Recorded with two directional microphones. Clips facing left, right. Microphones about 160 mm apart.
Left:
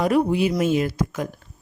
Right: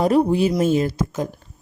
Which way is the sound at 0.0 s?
30° right (ahead or behind).